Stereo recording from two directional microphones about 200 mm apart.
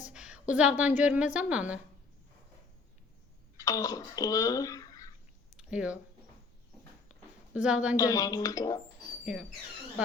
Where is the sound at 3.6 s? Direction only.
15° left (ahead or behind).